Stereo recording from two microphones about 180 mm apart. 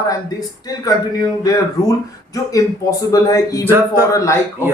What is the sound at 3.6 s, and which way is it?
Speech, 10° right (ahead or behind).